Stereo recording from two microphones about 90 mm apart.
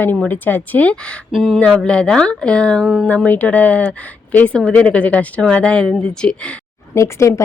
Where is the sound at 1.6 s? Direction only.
10° left (ahead or behind).